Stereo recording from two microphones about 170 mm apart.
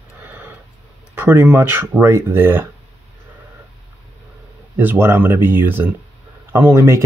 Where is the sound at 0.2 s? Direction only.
10° right (ahead or behind).